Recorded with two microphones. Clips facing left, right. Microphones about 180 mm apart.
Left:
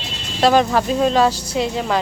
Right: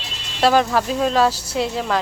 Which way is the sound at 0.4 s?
Centre (ahead or behind).